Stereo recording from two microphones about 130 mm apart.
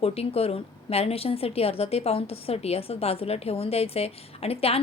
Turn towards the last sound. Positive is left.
turn(degrees=50)  # may be behind; listen again after turning